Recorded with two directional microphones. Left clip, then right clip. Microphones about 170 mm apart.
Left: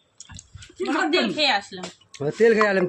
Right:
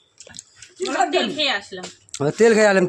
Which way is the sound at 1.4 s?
Centre (ahead or behind).